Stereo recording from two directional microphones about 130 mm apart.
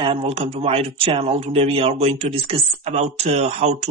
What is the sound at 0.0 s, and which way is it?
Speech, 45° right (ahead or behind).